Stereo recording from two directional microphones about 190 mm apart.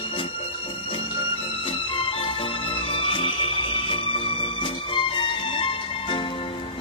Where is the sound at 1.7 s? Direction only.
30° left (ahead or behind).